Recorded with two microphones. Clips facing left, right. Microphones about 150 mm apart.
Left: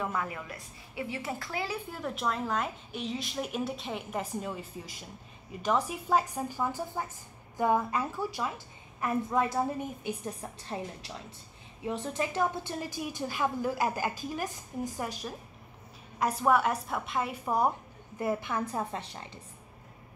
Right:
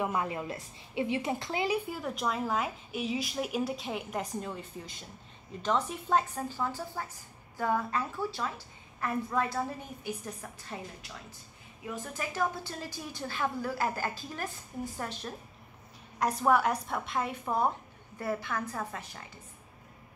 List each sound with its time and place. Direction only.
0.0 s a woman's voice: 20° right (ahead or behind)
1.9 s a woman's voice: centre (ahead or behind); by 18.6 s 15° left (ahead or behind)
18.7 s a woman's voice: 30° left (ahead or behind)